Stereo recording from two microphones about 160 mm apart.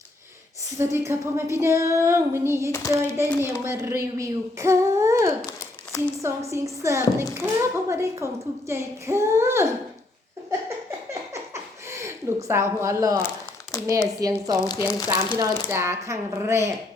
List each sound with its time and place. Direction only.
0.8 s a woman's voice: 15° right (ahead or behind)
5.5 s a sound: 20° left (ahead or behind)
6.2 s a woman's voice: 20° right (ahead or behind)
11.1 s a sound: 20° right (ahead or behind)
13.2 s crumpling: 20° left (ahead or behind)
14.2 s speech: 20° right (ahead or behind)
14.7 s speech: 25° left (ahead or behind)
15.4 s a woman's voice: 15° right (ahead or behind)